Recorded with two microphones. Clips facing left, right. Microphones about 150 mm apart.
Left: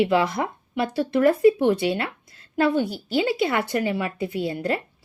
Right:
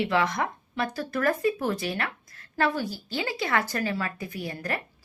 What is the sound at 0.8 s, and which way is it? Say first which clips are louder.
A woman's voice: left 8 dB; 25° left (ahead or behind).